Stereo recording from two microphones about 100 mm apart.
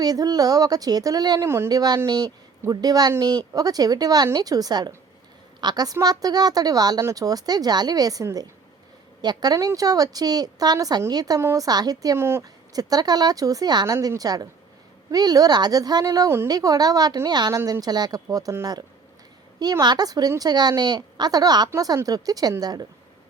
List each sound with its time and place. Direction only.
0.0 s a woman's voice: 40° right (ahead or behind)
1.4 s speech: 25° right (ahead or behind)
1.7 s a woman's voice: 40° right (ahead or behind)
12.1 s speech: 25° right (ahead or behind)
12.7 s a woman's voice: 40° right (ahead or behind)